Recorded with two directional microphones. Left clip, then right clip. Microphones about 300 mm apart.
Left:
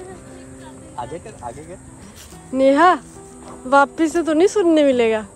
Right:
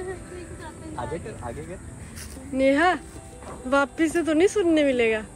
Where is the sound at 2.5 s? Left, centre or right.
Centre.